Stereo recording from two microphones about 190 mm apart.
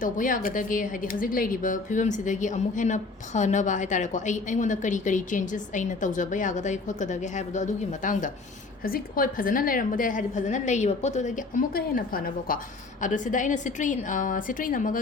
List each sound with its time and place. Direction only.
0.0 s a woman's voice: 45° left (ahead or behind)